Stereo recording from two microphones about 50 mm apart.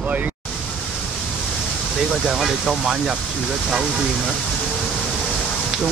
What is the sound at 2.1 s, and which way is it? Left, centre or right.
Speech, centre.